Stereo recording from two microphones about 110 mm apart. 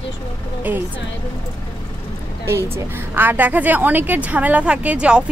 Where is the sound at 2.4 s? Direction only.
25° right (ahead or behind).